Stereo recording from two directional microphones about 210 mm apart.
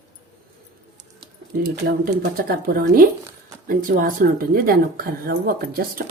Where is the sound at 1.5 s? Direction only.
45° right (ahead or behind).